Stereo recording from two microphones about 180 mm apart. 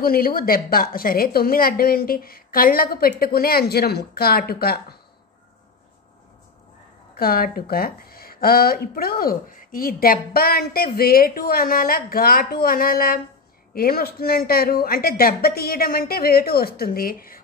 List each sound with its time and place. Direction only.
0.0 s speech: 55° left (ahead or behind)
7.2 s speech: 55° left (ahead or behind)